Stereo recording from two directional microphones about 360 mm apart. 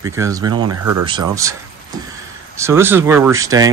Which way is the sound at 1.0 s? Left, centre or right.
Centre.